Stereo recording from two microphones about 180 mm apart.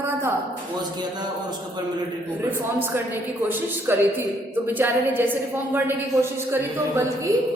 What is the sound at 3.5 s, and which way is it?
A woman's voice, 10° right (ahead or behind).